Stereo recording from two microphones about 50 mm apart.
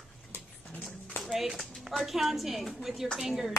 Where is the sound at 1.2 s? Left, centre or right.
Centre.